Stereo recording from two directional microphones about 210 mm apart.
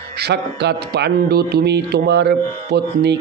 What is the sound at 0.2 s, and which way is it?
A man's voice, 50° right (ahead or behind).